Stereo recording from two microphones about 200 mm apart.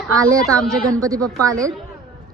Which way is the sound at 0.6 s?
5° left (ahead or behind).